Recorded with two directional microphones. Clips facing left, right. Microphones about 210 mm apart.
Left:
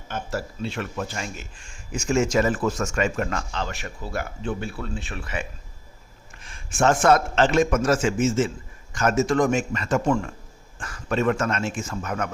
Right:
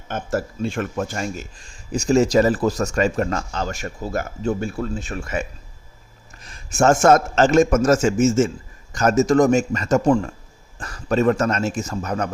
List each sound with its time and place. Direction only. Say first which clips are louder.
0.1 s a man's voice: right 5 dB; 50° right (ahead or behind)